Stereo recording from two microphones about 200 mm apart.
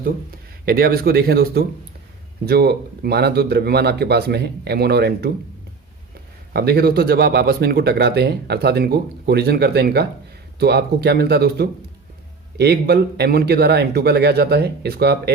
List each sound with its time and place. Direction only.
0.6 s speech: 50° right (ahead or behind)
6.5 s speech: 50° right (ahead or behind)